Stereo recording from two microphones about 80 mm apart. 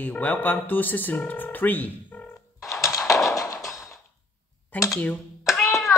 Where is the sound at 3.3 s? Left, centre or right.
Left.